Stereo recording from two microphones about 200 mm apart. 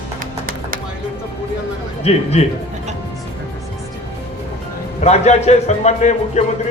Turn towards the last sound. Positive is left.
turn(degrees=35)  # may be behind; listen again after turning